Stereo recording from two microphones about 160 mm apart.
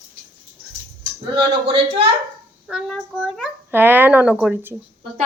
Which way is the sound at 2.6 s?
Centre (ahead or behind).